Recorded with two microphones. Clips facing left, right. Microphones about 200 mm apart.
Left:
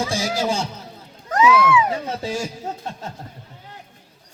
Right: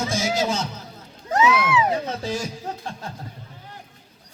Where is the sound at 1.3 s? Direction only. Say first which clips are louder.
Left 3 dB; 25° right (ahead or behind).